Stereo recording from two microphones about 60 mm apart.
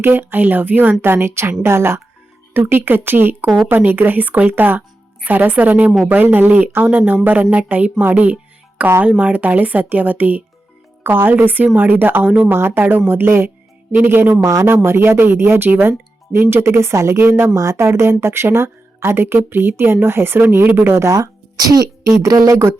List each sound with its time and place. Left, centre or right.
0.0 s a woman's voice: right
14.4 s speech: right
14.7 s a woman's voice: right
21.0 s speech: right
22.1 s speech: right